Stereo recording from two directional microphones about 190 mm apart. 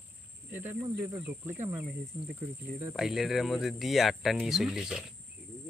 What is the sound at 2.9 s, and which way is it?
Speech, centre (ahead or behind).